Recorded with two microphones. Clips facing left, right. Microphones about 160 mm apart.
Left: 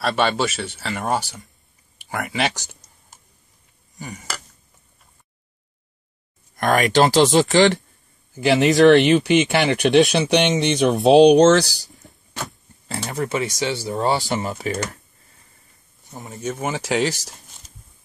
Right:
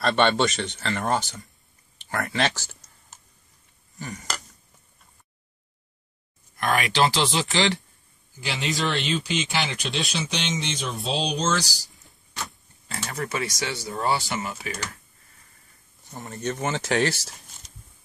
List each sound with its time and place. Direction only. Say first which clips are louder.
0.0 s speech: even; 5° left (ahead or behind)
4.0 s a sound: left 1 dB; 10° left (ahead or behind)
6.5 s speech: left 7 dB; 45° left (ahead or behind)
8.4 s speech: left 14 dB; 65° left (ahead or behind)
12.8 s speech: left 6 dB; 30° left (ahead or behind)
16.1 s speech: left 1 dB; centre (ahead or behind)